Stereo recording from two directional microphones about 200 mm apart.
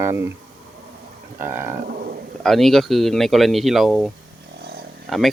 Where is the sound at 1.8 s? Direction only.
50° right (ahead or behind).